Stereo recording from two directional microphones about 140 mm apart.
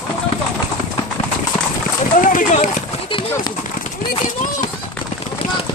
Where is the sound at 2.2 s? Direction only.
70° left (ahead or behind).